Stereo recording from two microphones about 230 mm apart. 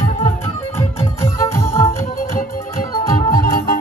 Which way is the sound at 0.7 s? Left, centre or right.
Centre.